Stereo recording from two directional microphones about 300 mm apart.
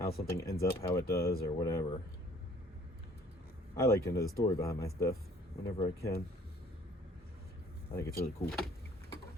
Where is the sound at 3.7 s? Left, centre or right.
Centre.